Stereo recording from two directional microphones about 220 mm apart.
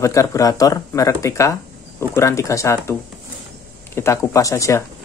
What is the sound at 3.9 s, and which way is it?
Speech, 10° left (ahead or behind).